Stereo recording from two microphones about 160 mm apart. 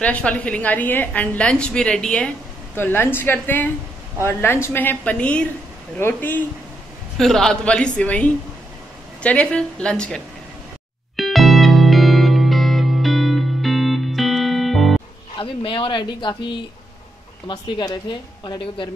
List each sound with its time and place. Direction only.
0.0 s a woman's voice: 10° left (ahead or behind)
11.1 s music: centre (ahead or behind)
15.3 s a woman's voice: 35° left (ahead or behind)